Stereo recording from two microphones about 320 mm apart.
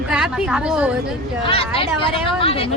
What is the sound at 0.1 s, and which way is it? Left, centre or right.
Speech, centre.